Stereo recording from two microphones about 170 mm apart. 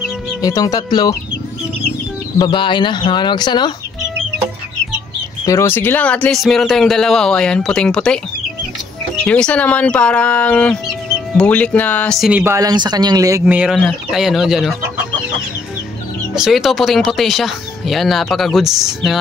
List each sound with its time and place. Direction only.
0.4 s speech: 20° left (ahead or behind)
2.3 s speech: 25° left (ahead or behind)
5.4 s speech: 15° left (ahead or behind)
12.3 s speech: 10° right (ahead or behind)
12.5 s speech: 25° right (ahead or behind)
13.5 s speech: 5° right (ahead or behind)
16.3 s speech: centre (ahead or behind)